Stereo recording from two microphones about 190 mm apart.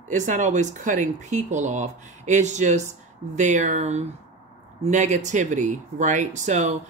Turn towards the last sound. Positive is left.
turn(degrees=-35)  # may be behind; listen again after turning